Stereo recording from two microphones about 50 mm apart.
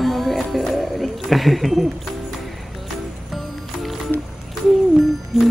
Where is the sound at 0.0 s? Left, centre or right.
Centre.